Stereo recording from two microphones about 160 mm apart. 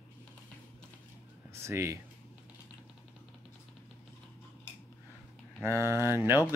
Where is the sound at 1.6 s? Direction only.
15° right (ahead or behind).